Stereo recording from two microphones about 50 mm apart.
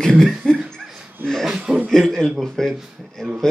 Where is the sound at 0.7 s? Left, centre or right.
Centre.